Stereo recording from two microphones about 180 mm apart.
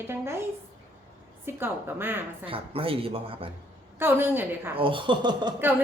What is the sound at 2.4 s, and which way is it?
A man's voice, 30° right (ahead or behind).